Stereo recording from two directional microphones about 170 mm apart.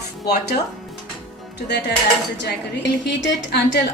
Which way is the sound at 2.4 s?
90° left.